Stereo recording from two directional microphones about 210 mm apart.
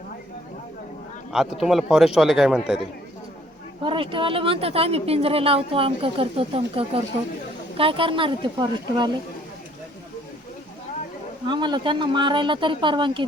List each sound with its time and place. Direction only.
1.6 s a man's voice: centre (ahead or behind)
3.8 s speech: 25° right (ahead or behind)
11.4 s speech: 20° right (ahead or behind)